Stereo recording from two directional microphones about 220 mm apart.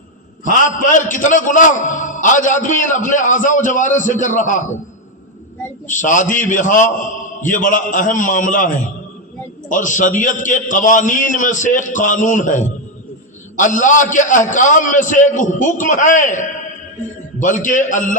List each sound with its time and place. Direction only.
0.9 s a man's voice: 35° left (ahead or behind)
5.9 s a man's voice: 35° left (ahead or behind)